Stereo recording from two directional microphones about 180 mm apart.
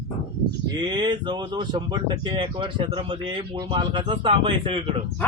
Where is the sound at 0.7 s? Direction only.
25° right (ahead or behind).